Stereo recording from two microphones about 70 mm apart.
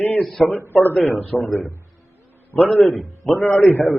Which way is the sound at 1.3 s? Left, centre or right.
Left.